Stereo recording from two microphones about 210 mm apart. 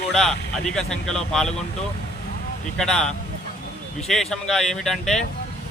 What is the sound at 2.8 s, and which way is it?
Speech, 5° left (ahead or behind).